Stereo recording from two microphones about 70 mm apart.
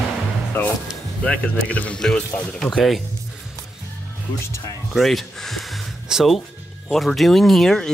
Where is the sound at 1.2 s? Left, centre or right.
Centre.